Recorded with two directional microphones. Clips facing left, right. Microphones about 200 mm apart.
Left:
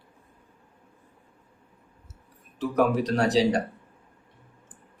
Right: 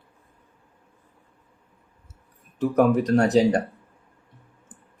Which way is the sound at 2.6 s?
50° right (ahead or behind).